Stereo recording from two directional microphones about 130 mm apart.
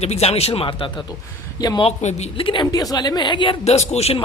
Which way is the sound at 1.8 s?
60° left (ahead or behind).